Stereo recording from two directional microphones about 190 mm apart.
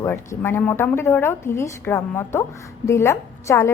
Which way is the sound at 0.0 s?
15° left (ahead or behind).